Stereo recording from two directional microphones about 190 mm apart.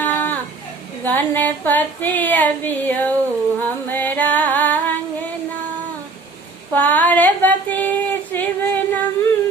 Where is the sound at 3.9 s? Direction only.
10° left (ahead or behind).